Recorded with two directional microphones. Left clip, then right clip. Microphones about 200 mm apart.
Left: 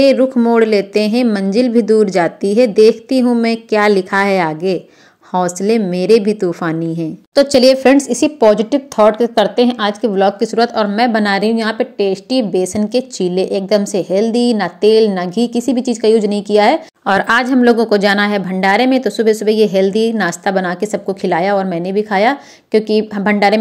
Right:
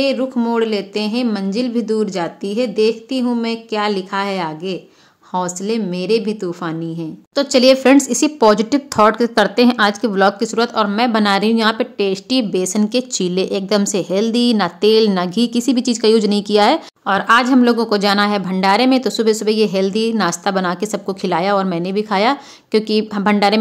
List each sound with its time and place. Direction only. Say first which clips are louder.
0.0 s a woman's voice: left 7 dB; 20° left (ahead or behind); by 16.8 s centre (ahead or behind)
17.0 s a woman's voice: even; 20° left (ahead or behind); by 23.6 s centre (ahead or behind)